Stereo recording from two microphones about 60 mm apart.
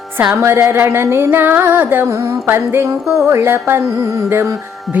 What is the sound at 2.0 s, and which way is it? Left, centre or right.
Music, right.